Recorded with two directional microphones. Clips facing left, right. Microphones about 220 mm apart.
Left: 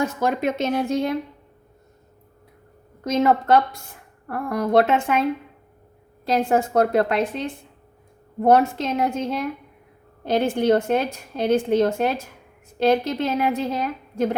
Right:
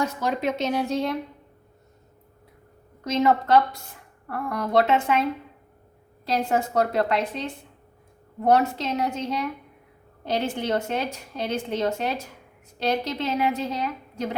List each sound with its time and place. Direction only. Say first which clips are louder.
0.0 s a woman's voice: left 3 dB; 50° left (ahead or behind)
3.0 s a woman's voice: left 2 dB; 55° left (ahead or behind)
6.2 s a woman's voice: left 4 dB; 55° left (ahead or behind)
8.4 s a woman's voice: left 3 dB; 50° left (ahead or behind)